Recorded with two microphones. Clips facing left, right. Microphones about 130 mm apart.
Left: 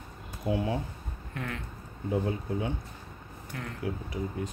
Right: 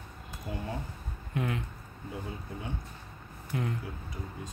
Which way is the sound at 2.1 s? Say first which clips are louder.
Left 10 dB; 90° left.